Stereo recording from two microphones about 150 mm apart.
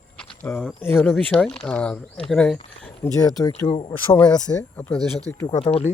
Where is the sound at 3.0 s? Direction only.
25° left (ahead or behind).